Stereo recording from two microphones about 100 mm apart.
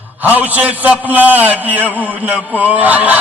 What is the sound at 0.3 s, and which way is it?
Speech, 15° right (ahead or behind).